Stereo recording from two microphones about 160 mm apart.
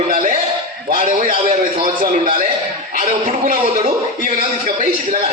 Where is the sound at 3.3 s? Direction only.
55° right (ahead or behind).